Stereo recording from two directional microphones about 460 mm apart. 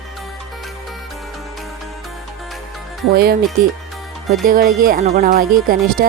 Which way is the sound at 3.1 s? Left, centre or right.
Centre.